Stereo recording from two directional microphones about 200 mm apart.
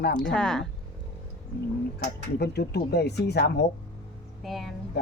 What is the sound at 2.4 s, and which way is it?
Speech, 55° left (ahead or behind).